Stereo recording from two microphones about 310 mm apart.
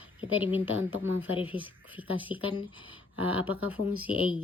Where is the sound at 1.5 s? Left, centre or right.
Centre.